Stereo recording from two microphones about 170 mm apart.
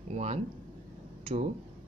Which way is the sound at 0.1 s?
40° right (ahead or behind).